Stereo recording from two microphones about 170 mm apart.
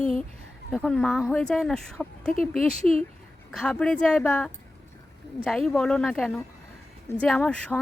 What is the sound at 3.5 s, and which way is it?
Speech, 5° left (ahead or behind).